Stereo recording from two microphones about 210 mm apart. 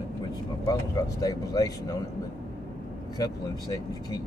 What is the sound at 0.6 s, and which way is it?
Speech, 15° left (ahead or behind).